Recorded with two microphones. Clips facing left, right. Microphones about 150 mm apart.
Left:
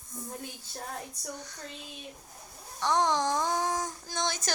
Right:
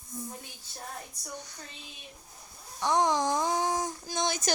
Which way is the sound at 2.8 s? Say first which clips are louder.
Right 1 dB; 10° right (ahead or behind).